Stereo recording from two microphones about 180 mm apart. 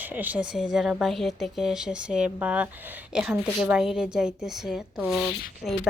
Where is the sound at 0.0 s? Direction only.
10° right (ahead or behind).